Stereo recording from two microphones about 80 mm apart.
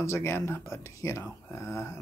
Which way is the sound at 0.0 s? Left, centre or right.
Left.